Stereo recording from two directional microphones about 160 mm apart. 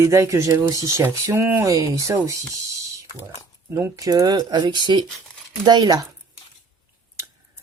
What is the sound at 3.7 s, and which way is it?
Speech, 20° right (ahead or behind).